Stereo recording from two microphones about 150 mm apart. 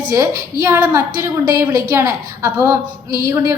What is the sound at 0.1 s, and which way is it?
A woman's voice, 20° right (ahead or behind).